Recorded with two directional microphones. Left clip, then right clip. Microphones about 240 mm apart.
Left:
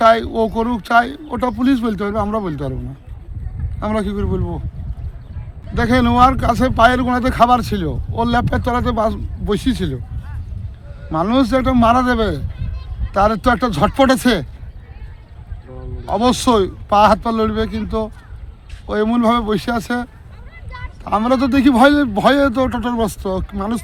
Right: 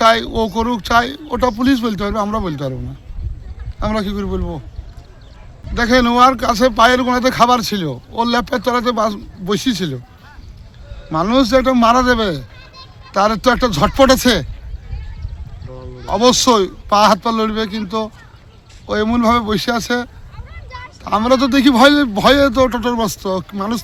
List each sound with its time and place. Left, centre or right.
0.0 s speech: centre
3.8 s speech: centre
5.7 s speech: centre
11.1 s speech: centre
12.5 s a sound: right
13.1 s speech: centre
16.0 s speech: centre
20.7 s vehicle: right
21.0 s speech: centre